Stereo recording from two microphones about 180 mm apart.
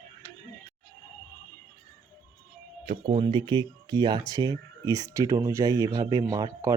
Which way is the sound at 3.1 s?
30° right (ahead or behind).